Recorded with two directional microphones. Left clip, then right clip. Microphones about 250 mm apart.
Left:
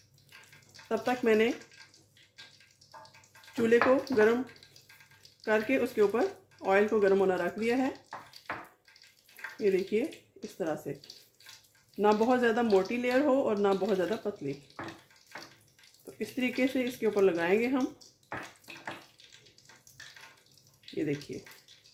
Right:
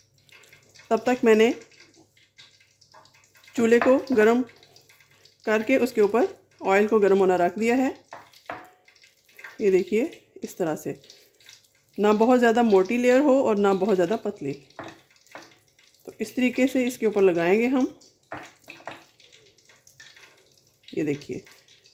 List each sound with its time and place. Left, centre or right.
0.9 s speech: right
3.5 s speech: right
5.4 s speech: right
9.6 s speech: right
11.9 s speech: right
16.1 s speech: right
20.9 s speech: right